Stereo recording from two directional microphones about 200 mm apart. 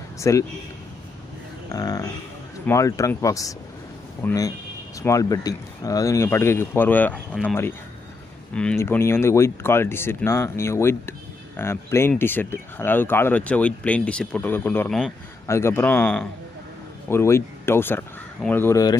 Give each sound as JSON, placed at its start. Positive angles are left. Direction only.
{"t": 0.2, "sound": "speech", "side_deg": 15}
{"t": 1.7, "sound": "speech", "side_deg": 15}